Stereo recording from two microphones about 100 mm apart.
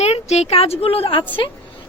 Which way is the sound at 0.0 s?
90° left.